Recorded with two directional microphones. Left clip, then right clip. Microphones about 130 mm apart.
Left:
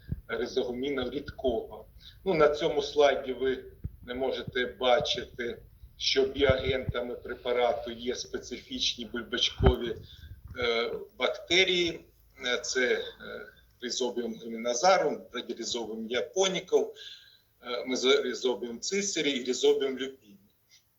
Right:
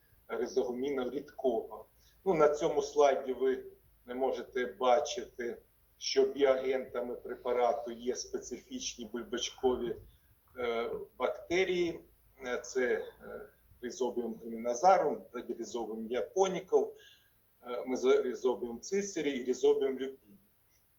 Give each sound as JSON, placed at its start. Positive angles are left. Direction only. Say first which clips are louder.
{"t": 0.3, "sound": "a man's voice", "louder": "left 2 dB", "side_deg": 25}
{"t": 1.4, "sound": "speech", "louder": "left 2 dB", "side_deg": -10}
{"t": 2.2, "sound": "a man's voice", "louder": "left 3 dB", "side_deg": 25}
{"t": 9.6, "sound": "speech", "louder": "left 4 dB", "side_deg": -5}
{"t": 10.5, "sound": "a man's voice", "louder": "left 5 dB", "side_deg": 30}
{"t": 14.2, "sound": "a man's voice", "louder": "left 3 dB", "side_deg": 30}